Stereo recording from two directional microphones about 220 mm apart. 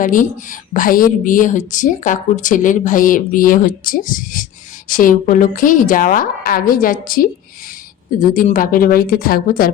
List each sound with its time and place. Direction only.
0.0 s a woman's voice: 35° left (ahead or behind)